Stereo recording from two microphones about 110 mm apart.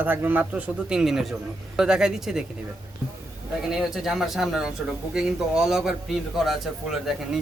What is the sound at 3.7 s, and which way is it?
Speech, 5° right (ahead or behind).